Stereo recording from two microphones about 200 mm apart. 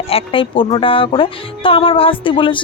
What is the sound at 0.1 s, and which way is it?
Speech, 25° left (ahead or behind).